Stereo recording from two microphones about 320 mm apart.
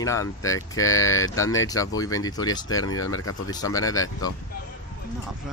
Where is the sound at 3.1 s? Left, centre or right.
Left.